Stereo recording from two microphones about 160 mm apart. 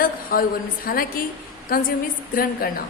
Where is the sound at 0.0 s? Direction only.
65° left (ahead or behind).